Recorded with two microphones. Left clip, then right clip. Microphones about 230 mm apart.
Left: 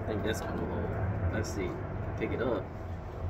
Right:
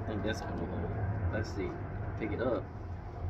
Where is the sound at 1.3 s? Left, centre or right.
Centre.